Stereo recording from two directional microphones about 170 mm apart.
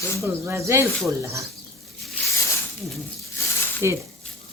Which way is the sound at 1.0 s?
15° right (ahead or behind).